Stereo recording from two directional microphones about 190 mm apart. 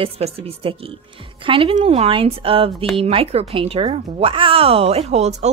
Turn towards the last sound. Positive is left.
turn(degrees=-35)  # may be behind; listen again after turning